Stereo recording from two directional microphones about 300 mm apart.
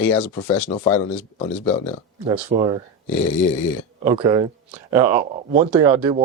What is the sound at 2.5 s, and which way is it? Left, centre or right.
Speech, centre.